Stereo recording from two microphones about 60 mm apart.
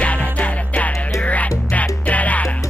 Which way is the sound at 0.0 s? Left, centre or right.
Left.